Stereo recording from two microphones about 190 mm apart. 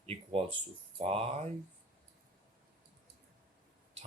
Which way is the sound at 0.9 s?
30° right (ahead or behind).